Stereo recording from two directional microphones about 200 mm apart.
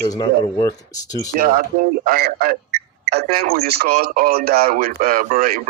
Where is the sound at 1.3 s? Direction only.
45° right (ahead or behind).